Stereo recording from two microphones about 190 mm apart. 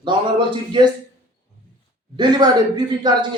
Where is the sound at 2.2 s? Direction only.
20° right (ahead or behind).